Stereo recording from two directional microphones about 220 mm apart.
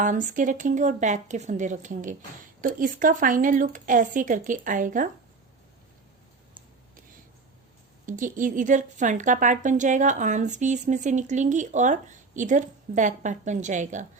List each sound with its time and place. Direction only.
0.0 s a woman's voice: 35° right (ahead or behind)
8.0 s a woman's voice: 35° right (ahead or behind)